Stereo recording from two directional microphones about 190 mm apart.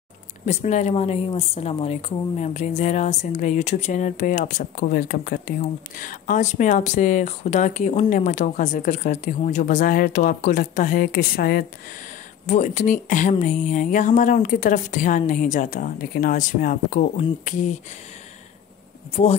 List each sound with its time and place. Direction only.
0.5 s speech: 35° left (ahead or behind)
12.4 s speech: 40° left (ahead or behind)